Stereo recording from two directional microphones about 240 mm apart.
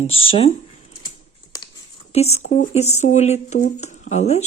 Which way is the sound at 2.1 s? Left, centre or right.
Left.